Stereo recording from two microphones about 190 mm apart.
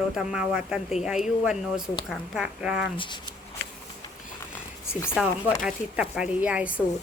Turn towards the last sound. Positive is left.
turn(degrees=-5)  # may be behind; listen again after turning